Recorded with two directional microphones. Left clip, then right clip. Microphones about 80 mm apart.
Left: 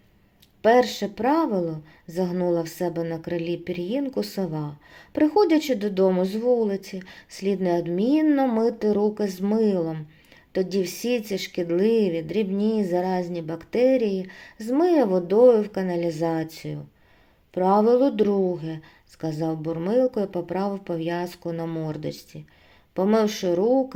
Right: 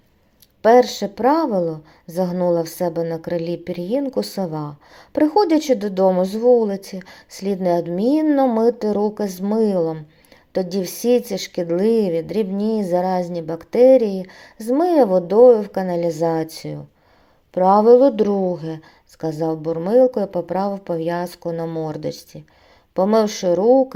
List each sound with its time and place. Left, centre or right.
0.6 s a woman's voice: right
21.8 s speech: right
23.1 s a woman's voice: right